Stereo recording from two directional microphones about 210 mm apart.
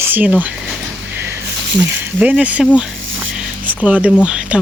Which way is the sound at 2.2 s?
5° right (ahead or behind).